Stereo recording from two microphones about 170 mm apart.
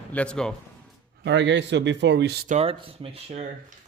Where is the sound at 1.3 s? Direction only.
90° right.